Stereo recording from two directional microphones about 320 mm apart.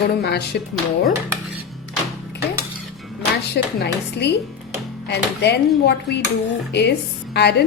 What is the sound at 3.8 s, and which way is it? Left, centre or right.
A woman's voice, left.